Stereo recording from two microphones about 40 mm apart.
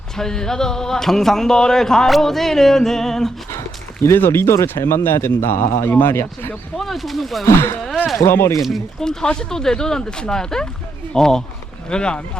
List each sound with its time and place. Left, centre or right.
0.2 s speech: centre
4.1 s a man's voice: left
6.7 s speech: centre
7.5 s speech: left
9.0 s speech: centre